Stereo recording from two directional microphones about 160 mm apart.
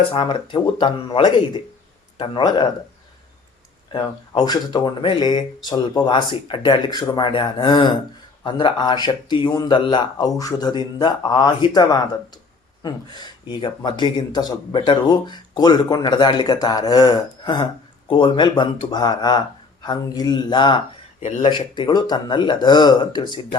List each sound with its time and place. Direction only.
0.1 s speech: 30° left (ahead or behind)
3.8 s speech: 30° left (ahead or behind)